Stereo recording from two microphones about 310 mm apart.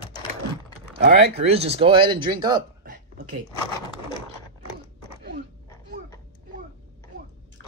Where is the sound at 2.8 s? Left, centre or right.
Right.